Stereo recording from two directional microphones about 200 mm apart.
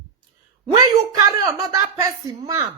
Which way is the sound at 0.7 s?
20° right (ahead or behind).